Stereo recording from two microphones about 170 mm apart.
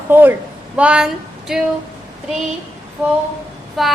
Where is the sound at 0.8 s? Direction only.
5° right (ahead or behind).